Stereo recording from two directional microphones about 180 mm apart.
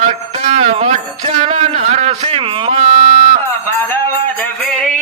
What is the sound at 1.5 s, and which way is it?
Music, 35° right (ahead or behind).